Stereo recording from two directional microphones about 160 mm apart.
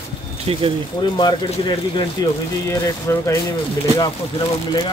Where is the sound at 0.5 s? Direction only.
35° right (ahead or behind).